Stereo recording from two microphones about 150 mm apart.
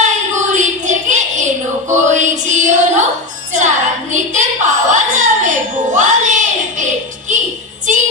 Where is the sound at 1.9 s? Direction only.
55° right (ahead or behind).